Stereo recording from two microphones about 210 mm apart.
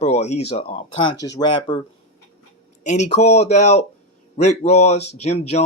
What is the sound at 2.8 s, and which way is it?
Speech, 35° left (ahead or behind).